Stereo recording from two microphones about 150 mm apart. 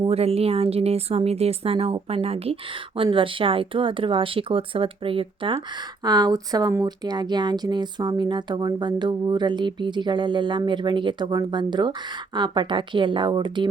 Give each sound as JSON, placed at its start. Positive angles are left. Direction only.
{"t": 0.1, "sound": "speech", "side_deg": -40}